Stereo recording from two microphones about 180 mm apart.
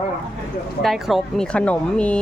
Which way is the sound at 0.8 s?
Centre (ahead or behind).